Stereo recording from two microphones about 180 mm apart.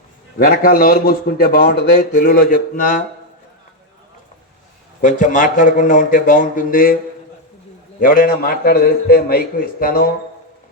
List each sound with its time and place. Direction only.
0.3 s speech: 55° left (ahead or behind)
4.9 s speech: 50° left (ahead or behind)
8.0 s a man's voice: 50° left (ahead or behind)